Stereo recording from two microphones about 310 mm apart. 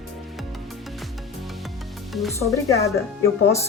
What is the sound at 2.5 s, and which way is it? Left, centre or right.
Speech, centre.